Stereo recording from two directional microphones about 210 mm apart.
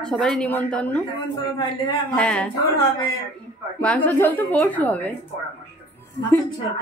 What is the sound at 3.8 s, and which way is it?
A woman's voice, 5° left (ahead or behind).